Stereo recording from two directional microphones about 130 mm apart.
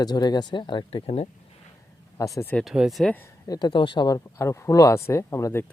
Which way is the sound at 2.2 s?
25° left (ahead or behind).